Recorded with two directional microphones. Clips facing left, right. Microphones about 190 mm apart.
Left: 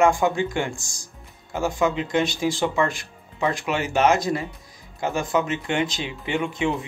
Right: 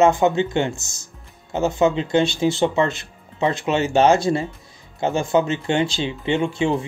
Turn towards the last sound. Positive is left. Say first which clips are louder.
# right 4 dB
turn(degrees=-30)  # may be behind; listen again after turning